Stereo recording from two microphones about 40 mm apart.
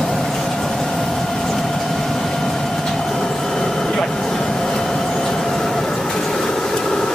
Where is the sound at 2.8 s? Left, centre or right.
Centre.